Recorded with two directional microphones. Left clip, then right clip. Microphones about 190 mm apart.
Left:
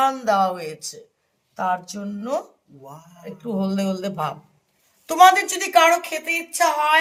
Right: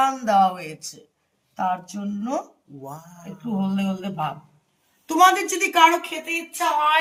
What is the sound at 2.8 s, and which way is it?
Speech, 30° right (ahead or behind).